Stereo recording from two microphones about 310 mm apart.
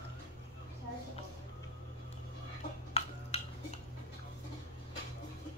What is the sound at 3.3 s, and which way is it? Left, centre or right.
Music, centre.